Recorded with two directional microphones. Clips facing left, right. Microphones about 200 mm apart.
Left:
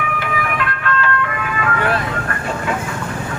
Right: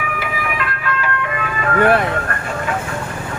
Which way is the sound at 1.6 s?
55° right (ahead or behind).